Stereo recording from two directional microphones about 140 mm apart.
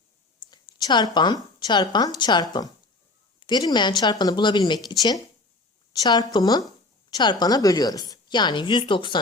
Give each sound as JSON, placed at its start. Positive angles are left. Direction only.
{"t": 0.5, "sound": "a woman's voice", "side_deg": 30}